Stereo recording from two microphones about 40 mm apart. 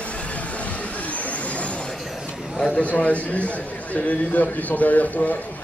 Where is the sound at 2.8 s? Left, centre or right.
Left.